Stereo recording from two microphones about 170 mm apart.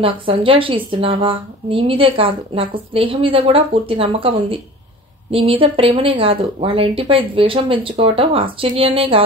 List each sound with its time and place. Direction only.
0.0 s a woman's voice: 30° right (ahead or behind)